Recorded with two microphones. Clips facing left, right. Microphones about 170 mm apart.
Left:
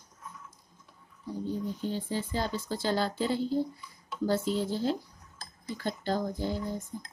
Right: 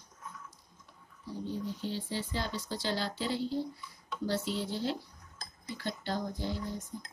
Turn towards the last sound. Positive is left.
turn(degrees=45)  # may be behind; listen again after turning